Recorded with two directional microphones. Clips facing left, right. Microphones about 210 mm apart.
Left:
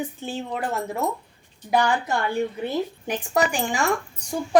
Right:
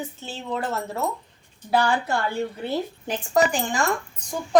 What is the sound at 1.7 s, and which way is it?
Speech, 15° left (ahead or behind).